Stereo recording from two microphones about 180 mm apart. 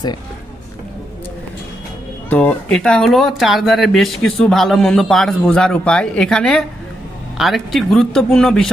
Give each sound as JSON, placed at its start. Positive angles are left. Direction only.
{"t": 2.3, "sound": "speech", "side_deg": 5}